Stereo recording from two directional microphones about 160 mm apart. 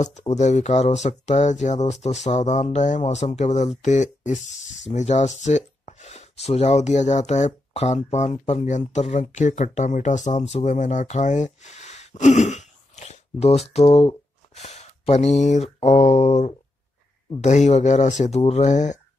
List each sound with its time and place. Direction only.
0.3 s speech: 45° left (ahead or behind)